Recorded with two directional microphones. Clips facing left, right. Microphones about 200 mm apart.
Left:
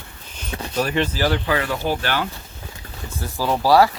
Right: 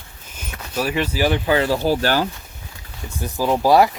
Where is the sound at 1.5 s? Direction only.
30° right (ahead or behind).